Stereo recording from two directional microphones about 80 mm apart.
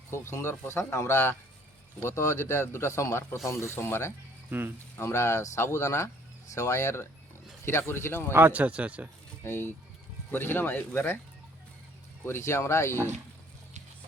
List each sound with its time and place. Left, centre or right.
0.1 s speech: left
8.3 s speech: right
9.4 s speech: left
12.2 s speech: left